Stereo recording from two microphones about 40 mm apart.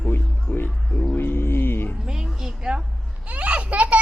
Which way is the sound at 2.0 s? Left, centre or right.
Centre.